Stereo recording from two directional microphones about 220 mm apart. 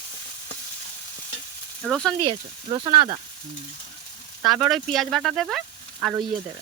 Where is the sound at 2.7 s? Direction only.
20° right (ahead or behind).